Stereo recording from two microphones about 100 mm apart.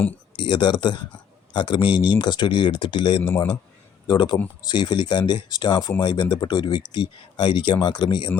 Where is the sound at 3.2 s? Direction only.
20° left (ahead or behind).